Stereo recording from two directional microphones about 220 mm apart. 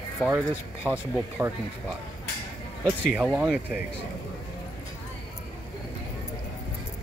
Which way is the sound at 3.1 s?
5° right (ahead or behind).